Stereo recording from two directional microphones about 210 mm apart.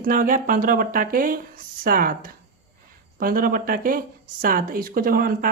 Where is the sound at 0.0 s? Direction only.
40° right (ahead or behind).